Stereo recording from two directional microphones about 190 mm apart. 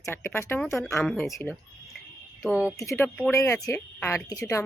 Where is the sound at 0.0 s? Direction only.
15° left (ahead or behind).